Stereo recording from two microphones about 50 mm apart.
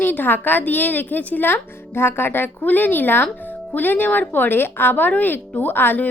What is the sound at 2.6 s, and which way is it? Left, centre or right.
Speech, left.